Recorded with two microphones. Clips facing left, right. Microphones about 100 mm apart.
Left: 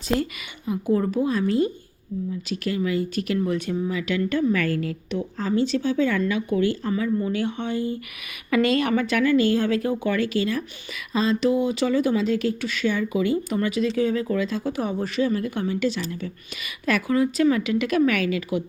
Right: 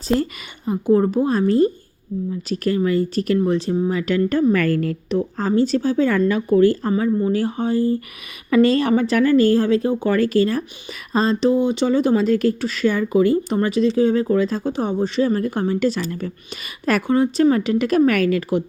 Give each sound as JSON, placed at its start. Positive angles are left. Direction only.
{"t": 0.2, "sound": "a woman's voice", "side_deg": -35}
{"t": 12.1, "sound": "a woman's voice", "side_deg": -45}
{"t": 15.2, "sound": "a woman's voice", "side_deg": -40}
{"t": 16.8, "sound": "a woman's voice", "side_deg": -35}